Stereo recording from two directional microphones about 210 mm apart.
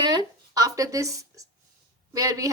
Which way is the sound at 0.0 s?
20° right (ahead or behind).